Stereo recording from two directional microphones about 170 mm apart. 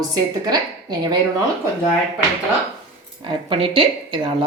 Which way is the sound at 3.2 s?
30° right (ahead or behind).